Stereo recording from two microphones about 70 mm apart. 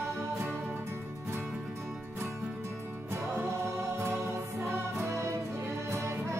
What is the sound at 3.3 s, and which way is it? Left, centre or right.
Music, right.